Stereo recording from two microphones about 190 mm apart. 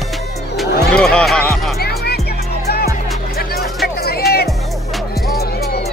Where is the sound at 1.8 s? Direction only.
55° left (ahead or behind).